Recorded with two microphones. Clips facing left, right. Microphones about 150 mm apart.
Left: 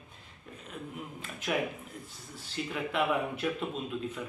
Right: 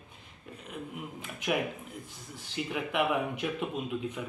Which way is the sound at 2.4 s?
15° right (ahead or behind).